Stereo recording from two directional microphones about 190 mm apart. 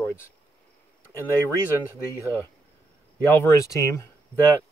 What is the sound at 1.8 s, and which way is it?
Speech, 10° left (ahead or behind).